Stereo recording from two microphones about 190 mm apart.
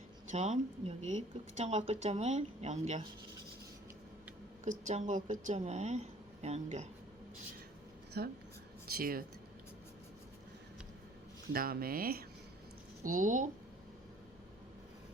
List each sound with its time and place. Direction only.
0.3 s speech: 35° right (ahead or behind)
4.6 s speech: 40° right (ahead or behind)
8.1 s speech: 55° right (ahead or behind)
11.5 s speech: 50° right (ahead or behind)